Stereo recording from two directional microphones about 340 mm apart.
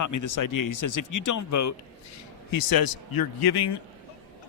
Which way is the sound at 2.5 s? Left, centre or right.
Left.